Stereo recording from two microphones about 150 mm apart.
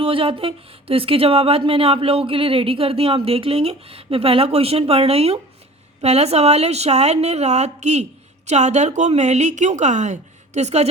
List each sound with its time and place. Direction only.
0.0 s a woman's voice: 35° right (ahead or behind)